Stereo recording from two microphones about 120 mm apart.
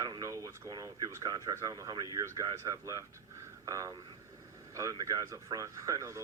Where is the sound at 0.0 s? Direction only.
30° right (ahead or behind).